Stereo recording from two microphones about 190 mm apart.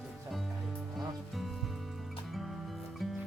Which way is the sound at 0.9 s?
Centre (ahead or behind).